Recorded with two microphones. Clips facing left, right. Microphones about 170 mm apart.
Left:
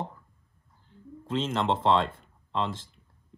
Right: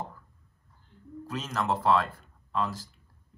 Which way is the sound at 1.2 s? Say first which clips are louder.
Left 4 dB; 25° left (ahead or behind).